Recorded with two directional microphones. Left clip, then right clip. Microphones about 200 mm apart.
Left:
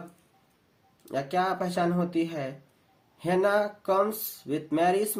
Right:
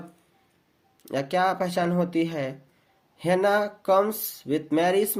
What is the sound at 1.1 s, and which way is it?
Speech, 45° right (ahead or behind).